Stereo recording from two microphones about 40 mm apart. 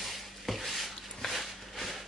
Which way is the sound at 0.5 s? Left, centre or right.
Centre.